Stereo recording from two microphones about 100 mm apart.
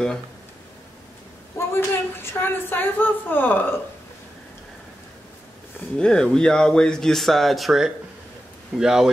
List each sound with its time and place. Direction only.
1.6 s a woman's voice: 25° left (ahead or behind)
5.9 s a man's voice: 10° left (ahead or behind)